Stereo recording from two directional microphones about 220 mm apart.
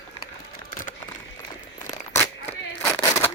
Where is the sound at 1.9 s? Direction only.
15° left (ahead or behind).